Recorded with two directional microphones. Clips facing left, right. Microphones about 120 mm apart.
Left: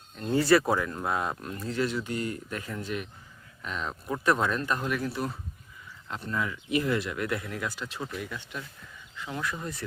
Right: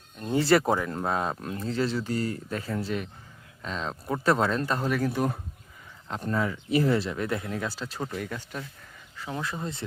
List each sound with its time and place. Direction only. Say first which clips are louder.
0.2 s speech: even; 20° right (ahead or behind)
5.0 s speech: right 5 dB; 50° right (ahead or behind)
9.1 s speech: right 1 dB; 30° right (ahead or behind)